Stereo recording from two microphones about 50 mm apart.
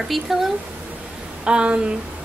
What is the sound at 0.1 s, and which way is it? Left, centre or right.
Speech, centre.